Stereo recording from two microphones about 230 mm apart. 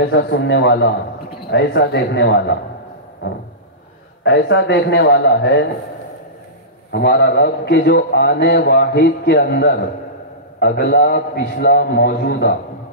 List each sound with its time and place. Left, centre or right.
0.1 s a man's voice: left
4.2 s a man's voice: left
6.9 s a man's voice: left